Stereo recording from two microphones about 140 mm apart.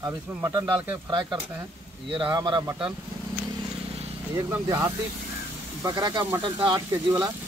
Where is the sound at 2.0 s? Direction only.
35° right (ahead or behind).